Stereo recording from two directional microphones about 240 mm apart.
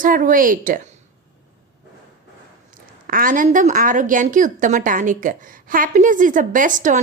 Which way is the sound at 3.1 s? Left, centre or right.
Right.